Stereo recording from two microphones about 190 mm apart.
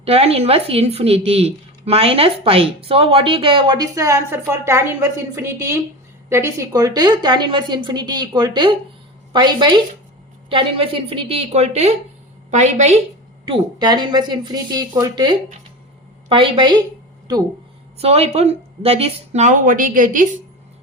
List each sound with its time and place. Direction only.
0.0 s speech: 30° right (ahead or behind)
13.5 s speech: 20° right (ahead or behind)
17.9 s speech: 30° right (ahead or behind)